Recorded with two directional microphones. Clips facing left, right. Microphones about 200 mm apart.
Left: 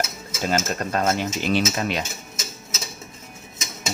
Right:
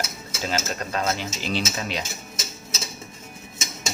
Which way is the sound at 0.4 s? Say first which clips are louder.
Left 4 dB; 50° left (ahead or behind).